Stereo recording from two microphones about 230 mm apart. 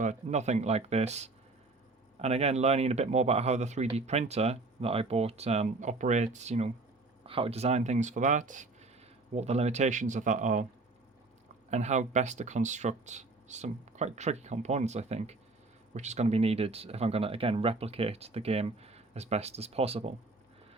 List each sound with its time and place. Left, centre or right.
0.0 s speech: right
11.7 s speech: right